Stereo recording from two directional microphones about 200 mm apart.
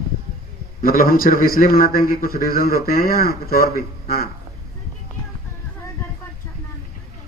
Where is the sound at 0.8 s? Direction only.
45° left (ahead or behind).